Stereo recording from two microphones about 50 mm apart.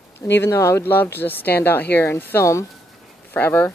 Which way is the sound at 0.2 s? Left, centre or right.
Left.